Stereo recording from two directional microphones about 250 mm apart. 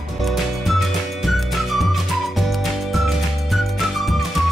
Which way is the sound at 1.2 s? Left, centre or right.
Centre.